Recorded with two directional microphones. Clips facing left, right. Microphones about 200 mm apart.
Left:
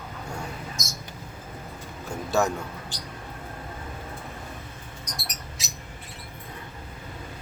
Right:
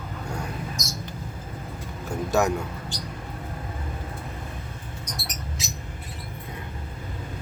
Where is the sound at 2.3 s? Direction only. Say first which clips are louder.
Right 1 dB; 15° right (ahead or behind).